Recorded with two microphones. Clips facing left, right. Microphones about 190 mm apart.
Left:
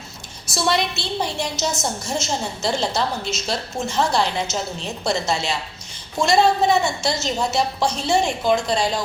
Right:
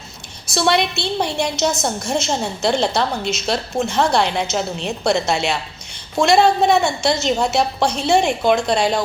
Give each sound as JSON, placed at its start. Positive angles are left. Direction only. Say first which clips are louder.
{"t": 0.5, "sound": "a woman's voice", "louder": "right 4 dB", "side_deg": -60}